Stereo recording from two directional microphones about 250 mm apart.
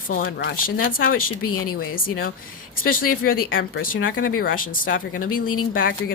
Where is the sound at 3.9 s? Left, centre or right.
Left.